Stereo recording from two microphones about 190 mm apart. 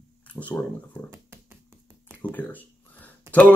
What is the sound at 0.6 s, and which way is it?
Speech, 10° left (ahead or behind).